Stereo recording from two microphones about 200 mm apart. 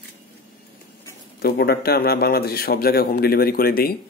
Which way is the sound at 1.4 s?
50° left (ahead or behind).